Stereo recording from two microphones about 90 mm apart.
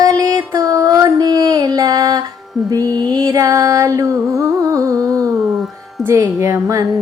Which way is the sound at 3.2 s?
40° right (ahead or behind).